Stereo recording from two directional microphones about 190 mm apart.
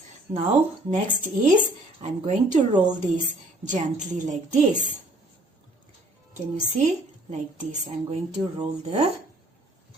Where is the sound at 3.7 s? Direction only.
40° right (ahead or behind).